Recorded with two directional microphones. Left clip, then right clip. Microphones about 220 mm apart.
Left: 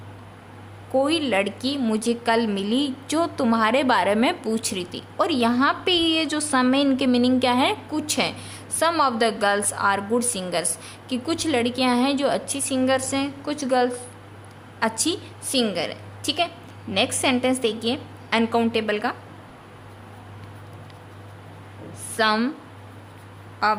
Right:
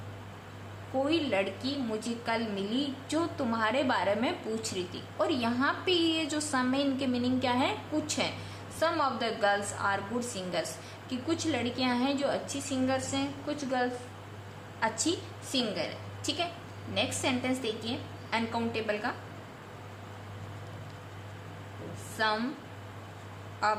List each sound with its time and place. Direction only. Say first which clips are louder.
1.0 s a woman's voice: left 4 dB; 80° left
22.2 s speech: left 9 dB; 65° left (ahead or behind)
23.6 s speech: left 8 dB; 55° left (ahead or behind)